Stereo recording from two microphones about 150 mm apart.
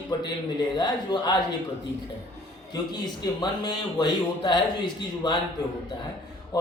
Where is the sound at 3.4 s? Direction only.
30° left (ahead or behind).